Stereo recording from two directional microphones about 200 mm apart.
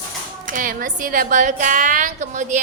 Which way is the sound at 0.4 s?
40° right (ahead or behind).